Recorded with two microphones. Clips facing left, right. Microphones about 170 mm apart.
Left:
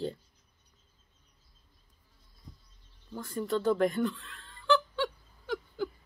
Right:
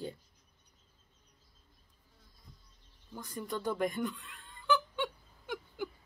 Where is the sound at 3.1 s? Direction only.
15° right (ahead or behind).